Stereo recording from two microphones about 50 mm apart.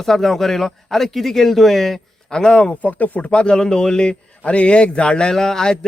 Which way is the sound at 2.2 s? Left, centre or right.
Centre.